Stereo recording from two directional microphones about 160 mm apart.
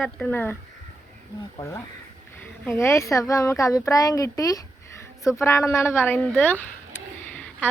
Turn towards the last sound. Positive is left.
turn(degrees=10)  # may be behind; listen again after turning